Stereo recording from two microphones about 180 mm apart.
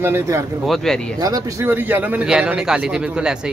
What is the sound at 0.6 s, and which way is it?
Speech, centre (ahead or behind).